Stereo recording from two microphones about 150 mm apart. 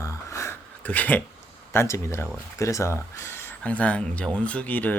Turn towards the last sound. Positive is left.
turn(degrees=10)  # may be behind; listen again after turning